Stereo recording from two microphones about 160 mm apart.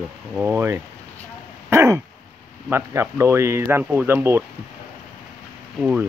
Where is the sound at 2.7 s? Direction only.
15° right (ahead or behind).